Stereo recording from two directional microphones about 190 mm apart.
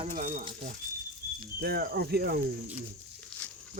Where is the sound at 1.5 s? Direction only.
55° right (ahead or behind).